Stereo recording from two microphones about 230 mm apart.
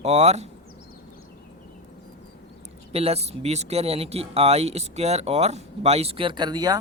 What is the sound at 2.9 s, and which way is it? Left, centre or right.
Speech, right.